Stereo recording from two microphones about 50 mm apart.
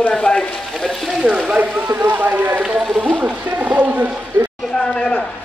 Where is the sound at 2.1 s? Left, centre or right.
Right.